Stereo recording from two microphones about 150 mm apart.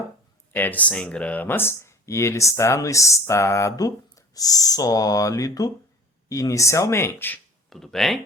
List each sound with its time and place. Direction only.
0.5 s speech: 10° left (ahead or behind)
7.7 s speech: centre (ahead or behind)